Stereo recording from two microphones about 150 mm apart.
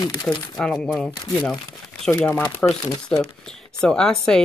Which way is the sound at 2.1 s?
15° left (ahead or behind).